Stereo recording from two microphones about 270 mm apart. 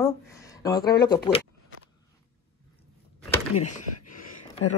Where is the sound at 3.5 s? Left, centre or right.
Left.